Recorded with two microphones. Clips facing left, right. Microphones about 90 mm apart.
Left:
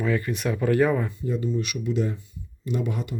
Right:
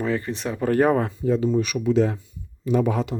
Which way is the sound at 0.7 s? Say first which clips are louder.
Right 3 dB; 55° right (ahead or behind).